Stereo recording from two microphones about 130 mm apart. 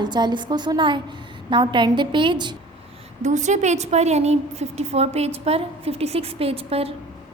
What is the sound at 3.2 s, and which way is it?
A woman's voice, 65° right (ahead or behind).